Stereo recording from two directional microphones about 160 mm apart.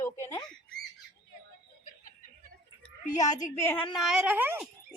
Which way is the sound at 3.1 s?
20° left (ahead or behind).